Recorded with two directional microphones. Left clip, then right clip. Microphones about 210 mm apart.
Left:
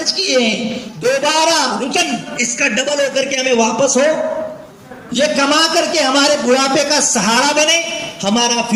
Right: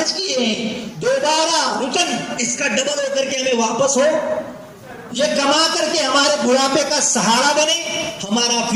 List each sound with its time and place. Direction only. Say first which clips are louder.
0.0 s a woman's voice: left 5 dB; 30° left (ahead or behind)
5.1 s a man's voice: left 3 dB; 30° left (ahead or behind)